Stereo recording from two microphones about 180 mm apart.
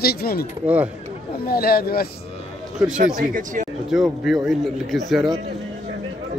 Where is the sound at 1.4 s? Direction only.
55° left (ahead or behind).